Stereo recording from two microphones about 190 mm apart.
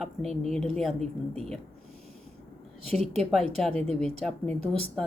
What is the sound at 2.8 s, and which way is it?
Speech, 35° right (ahead or behind).